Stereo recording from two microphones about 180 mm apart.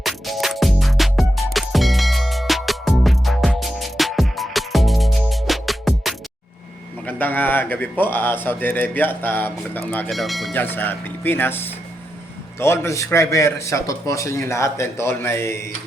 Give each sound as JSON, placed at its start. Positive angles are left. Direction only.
{"t": 0.0, "sound": "music", "side_deg": 0}
{"t": 7.0, "sound": "speech", "side_deg": 10}
{"t": 10.5, "sound": "speech", "side_deg": 10}